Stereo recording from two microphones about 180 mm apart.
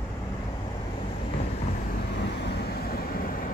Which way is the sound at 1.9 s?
65° left (ahead or behind).